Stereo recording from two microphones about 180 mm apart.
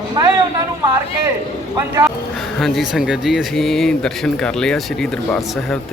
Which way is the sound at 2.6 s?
Centre (ahead or behind).